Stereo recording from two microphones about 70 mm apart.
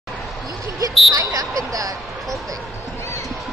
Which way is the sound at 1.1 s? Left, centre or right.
Right.